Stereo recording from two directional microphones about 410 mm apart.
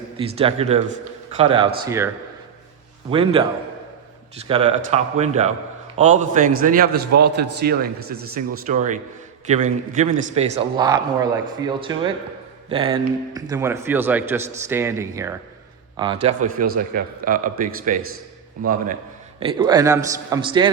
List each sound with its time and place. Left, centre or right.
0.2 s a man's voice: centre
3.1 s a man's voice: centre
4.4 s a man's voice: centre
16.2 s a man's voice: centre